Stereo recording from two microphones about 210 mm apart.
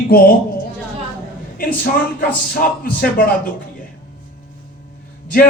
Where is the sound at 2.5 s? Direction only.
45° left (ahead or behind).